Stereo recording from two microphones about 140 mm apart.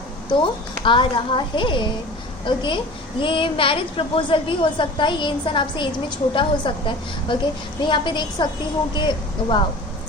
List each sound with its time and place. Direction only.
0.3 s a child's voice: 35° left (ahead or behind)